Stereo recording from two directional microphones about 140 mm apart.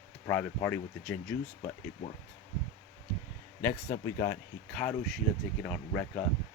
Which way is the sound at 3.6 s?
20° left (ahead or behind).